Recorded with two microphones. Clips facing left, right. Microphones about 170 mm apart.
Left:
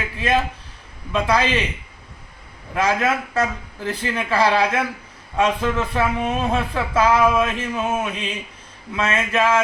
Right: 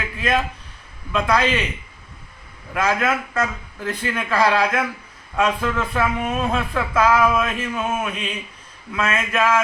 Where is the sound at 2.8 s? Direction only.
30° left (ahead or behind).